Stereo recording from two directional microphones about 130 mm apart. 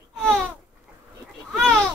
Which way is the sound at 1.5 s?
5° left (ahead or behind).